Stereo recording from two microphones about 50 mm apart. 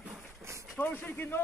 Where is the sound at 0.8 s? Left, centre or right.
Left.